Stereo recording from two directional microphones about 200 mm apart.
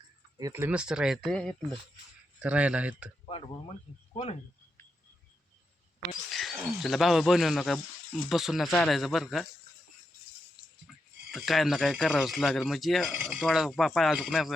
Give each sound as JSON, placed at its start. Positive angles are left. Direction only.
{"t": 0.3, "sound": "speech", "side_deg": -15}
{"t": 3.2, "sound": "speech", "side_deg": 25}
{"t": 6.3, "sound": "speech", "side_deg": 0}
{"t": 11.3, "sound": "speech", "side_deg": 0}